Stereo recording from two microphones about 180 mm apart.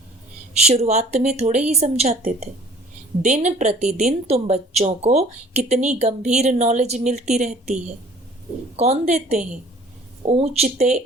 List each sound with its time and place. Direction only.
0.5 s a woman's voice: 35° right (ahead or behind)
8.7 s a woman's voice: 35° right (ahead or behind)